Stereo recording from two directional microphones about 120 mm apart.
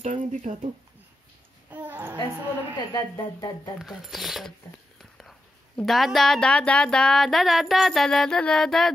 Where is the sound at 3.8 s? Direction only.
Centre (ahead or behind).